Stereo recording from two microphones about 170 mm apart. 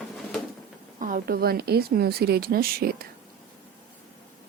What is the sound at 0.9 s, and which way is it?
Speech, 55° right (ahead or behind).